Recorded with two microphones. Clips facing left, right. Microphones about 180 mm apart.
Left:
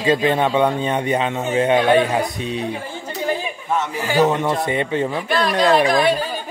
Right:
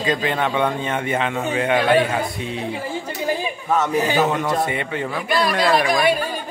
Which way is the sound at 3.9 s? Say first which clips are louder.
Left 2 dB; 20° right (ahead or behind).